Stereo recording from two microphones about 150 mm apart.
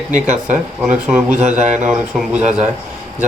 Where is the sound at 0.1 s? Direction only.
55° right (ahead or behind).